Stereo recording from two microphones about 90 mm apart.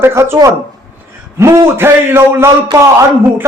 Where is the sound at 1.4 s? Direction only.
30° right (ahead or behind).